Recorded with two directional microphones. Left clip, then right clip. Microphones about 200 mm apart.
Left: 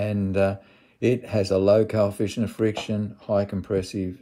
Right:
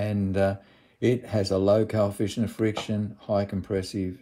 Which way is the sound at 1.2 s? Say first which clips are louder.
Left 3 dB; 20° right (ahead or behind).